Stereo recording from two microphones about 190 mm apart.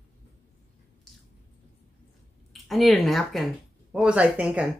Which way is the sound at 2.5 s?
Centre (ahead or behind).